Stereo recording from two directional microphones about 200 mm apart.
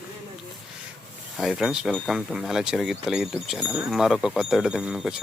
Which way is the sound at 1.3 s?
Centre (ahead or behind).